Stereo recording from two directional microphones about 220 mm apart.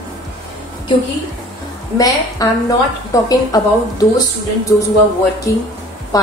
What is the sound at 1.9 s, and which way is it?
A woman's voice, 15° left (ahead or behind).